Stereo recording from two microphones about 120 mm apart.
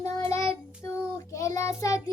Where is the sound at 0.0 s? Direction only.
25° left (ahead or behind).